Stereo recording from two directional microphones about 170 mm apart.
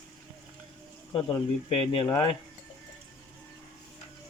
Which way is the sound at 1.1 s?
25° left (ahead or behind).